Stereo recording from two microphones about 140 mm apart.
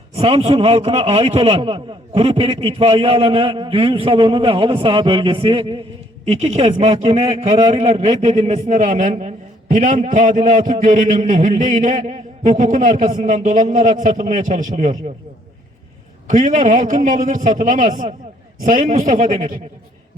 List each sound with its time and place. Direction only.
0.1 s a man's voice: 45° right (ahead or behind)
6.2 s a man's voice: 50° right (ahead or behind)
16.2 s a man's voice: 60° right (ahead or behind)